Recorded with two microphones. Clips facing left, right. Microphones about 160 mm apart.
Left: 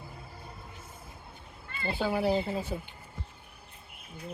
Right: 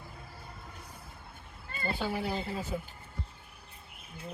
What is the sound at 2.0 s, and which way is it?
Speech, 40° left (ahead or behind).